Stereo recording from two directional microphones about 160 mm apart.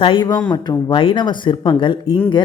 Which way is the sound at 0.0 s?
30° left (ahead or behind).